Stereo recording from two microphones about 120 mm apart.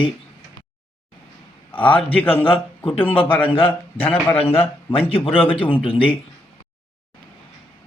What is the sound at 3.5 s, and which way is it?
Speech, 50° left (ahead or behind).